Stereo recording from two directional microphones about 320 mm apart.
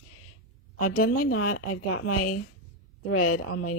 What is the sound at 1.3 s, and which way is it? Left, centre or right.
Speech, left.